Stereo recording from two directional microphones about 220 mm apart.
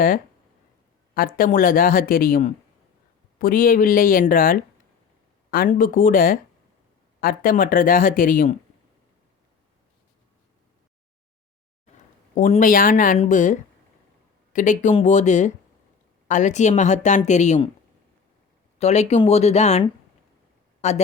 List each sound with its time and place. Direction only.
1.1 s a woman's voice: 40° left (ahead or behind)
12.3 s a woman's voice: 35° left (ahead or behind)
18.8 s a woman's voice: 30° left (ahead or behind)